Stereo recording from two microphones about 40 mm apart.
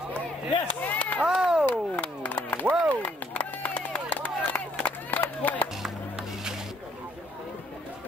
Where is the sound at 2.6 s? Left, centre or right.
Right.